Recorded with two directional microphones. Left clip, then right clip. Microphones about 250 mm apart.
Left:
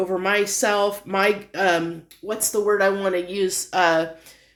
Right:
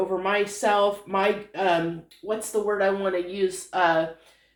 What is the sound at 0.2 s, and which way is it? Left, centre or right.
Speech, left.